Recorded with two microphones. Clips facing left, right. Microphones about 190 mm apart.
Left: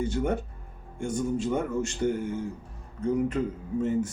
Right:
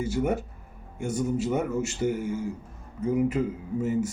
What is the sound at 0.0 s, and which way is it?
Speech, 5° right (ahead or behind).